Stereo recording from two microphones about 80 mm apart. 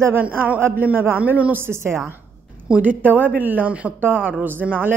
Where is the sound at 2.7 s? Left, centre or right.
Centre.